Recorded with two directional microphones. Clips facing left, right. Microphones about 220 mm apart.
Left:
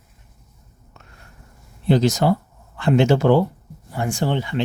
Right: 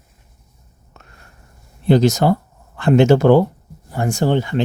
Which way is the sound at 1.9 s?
45° right (ahead or behind).